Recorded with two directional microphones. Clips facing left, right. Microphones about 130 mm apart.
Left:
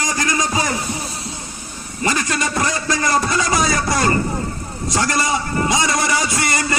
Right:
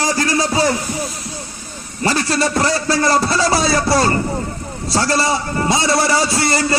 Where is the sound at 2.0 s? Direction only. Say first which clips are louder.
Right 3 dB; 35° right (ahead or behind).